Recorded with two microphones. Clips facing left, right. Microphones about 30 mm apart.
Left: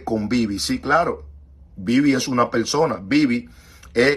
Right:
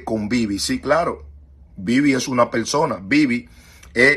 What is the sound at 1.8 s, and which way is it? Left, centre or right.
Speech, right.